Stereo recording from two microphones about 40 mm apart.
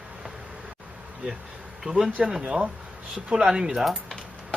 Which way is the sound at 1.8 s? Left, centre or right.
Centre.